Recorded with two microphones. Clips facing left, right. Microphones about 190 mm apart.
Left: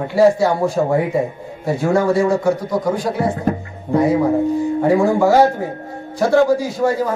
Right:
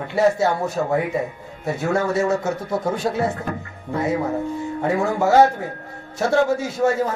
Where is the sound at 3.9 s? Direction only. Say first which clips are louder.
Left 7 dB; 20° left (ahead or behind).